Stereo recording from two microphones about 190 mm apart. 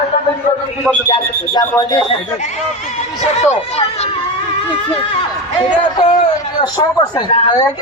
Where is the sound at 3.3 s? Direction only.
35° left (ahead or behind).